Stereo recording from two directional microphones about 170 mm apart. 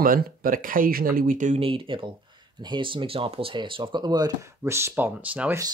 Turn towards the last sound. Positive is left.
turn(degrees=-10)  # may be behind; listen again after turning